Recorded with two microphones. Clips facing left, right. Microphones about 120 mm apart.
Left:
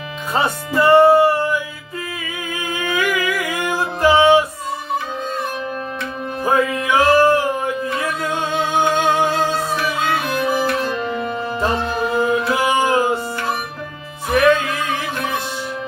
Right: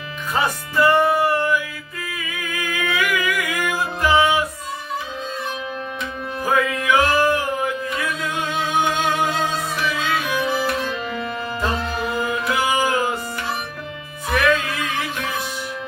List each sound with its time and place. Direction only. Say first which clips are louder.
0.3 s speech: left 2 dB; 30° left (ahead or behind)
2.5 s music: left 2 dB; 25° left (ahead or behind)
6.4 s music: left 3 dB; 30° left (ahead or behind)
11.8 s music: left 5 dB; 30° left (ahead or behind)